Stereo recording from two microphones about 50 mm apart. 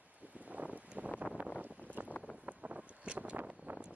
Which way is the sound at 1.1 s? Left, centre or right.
Right.